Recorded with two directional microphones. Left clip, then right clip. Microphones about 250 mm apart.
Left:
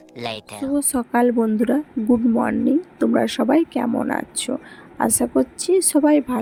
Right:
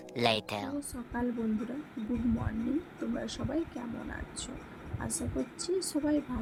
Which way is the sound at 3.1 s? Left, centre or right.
Left.